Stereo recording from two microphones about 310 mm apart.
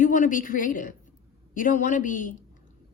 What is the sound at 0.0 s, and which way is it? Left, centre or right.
A woman's voice, left.